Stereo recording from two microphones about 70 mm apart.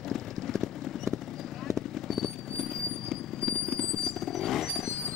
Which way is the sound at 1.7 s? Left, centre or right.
Right.